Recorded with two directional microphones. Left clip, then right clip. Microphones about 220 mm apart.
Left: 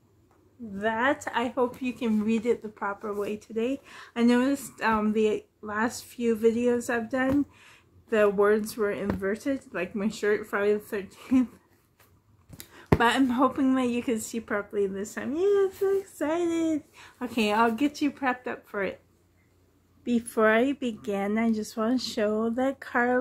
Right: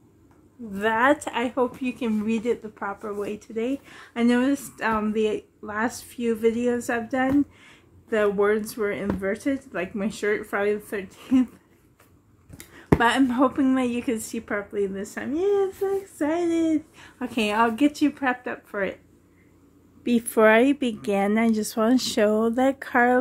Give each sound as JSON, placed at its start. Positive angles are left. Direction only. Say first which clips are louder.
{"t": 0.7, "sound": "speech", "louder": "right 5 dB", "side_deg": -10}
{"t": 12.5, "sound": "speech", "louder": "right 3 dB", "side_deg": 10}
{"t": 20.1, "sound": "speech", "louder": "right 5 dB", "side_deg": -15}